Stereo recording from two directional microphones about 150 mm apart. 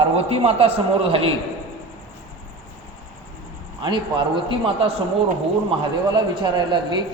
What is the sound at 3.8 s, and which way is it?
Speech, 30° right (ahead or behind).